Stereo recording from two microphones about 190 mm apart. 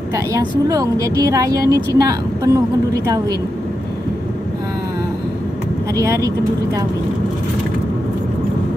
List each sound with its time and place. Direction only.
0.1 s a woman's voice: 15° right (ahead or behind)
5.9 s a woman's voice: 15° right (ahead or behind)